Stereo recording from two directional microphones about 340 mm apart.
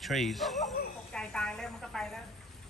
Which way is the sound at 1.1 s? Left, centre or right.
Centre.